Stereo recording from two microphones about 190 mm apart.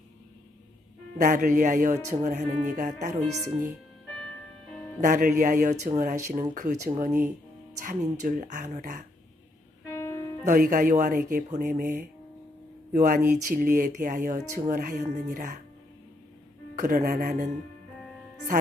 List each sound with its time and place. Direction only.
1.2 s speech: 45° right (ahead or behind)
4.9 s speech: 40° right (ahead or behind)
9.9 s music: 15° left (ahead or behind)
10.4 s speech: 45° right (ahead or behind)
16.7 s speech: 40° right (ahead or behind)